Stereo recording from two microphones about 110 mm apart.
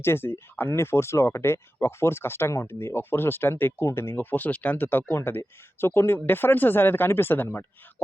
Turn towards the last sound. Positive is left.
turn(degrees=20)  # may be behind; listen again after turning